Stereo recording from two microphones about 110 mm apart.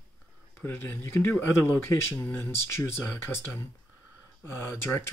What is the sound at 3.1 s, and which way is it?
Speech, 25° left (ahead or behind).